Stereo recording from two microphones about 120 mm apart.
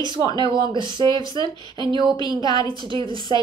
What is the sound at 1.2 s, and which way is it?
Speech, 35° left (ahead or behind).